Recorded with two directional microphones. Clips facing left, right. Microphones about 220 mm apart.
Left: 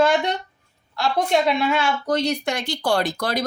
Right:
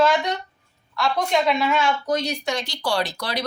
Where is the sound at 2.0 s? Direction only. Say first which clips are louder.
Left 2 dB; 55° left (ahead or behind).